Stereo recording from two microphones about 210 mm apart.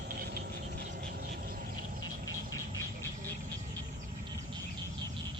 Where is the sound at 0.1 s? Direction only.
45° right (ahead or behind).